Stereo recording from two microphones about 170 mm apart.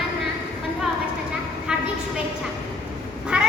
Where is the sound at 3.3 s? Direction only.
5° right (ahead or behind).